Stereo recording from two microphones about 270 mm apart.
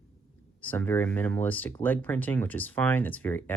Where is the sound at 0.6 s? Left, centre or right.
Centre.